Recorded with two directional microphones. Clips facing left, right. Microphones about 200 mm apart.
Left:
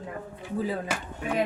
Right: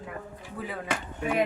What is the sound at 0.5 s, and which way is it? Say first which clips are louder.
Speech: left 7 dB; 25° left (ahead or behind).